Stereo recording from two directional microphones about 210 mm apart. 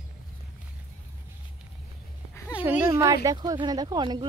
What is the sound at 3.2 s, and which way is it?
Speech, 20° right (ahead or behind).